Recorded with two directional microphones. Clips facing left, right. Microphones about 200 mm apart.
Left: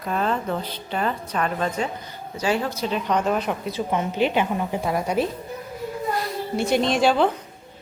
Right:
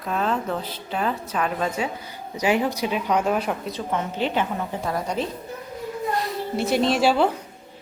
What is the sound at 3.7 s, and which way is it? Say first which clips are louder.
A woman's voice: left 2 dB; 15° left (ahead or behind).